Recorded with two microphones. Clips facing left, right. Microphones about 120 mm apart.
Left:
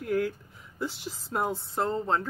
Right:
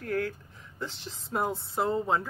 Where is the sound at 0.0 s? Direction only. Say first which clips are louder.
Left 3 dB; 10° left (ahead or behind).